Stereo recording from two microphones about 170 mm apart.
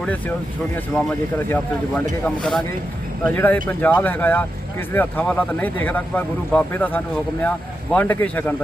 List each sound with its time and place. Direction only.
0.0 s speech: 10° left (ahead or behind)
2.2 s speech: 5° left (ahead or behind)